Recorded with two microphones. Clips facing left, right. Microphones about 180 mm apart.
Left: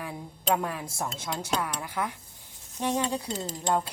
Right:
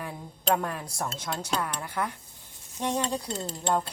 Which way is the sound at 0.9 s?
15° left (ahead or behind).